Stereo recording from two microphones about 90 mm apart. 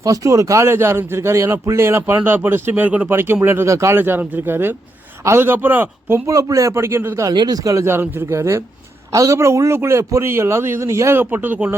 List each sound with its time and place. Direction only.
0.0 s a man's voice: 40° right (ahead or behind); by 6.2 s 25° right (ahead or behind)
6.2 s a man's voice: 35° right (ahead or behind)
7.3 s a man's voice: 45° right (ahead or behind); by 11.8 s 20° right (ahead or behind)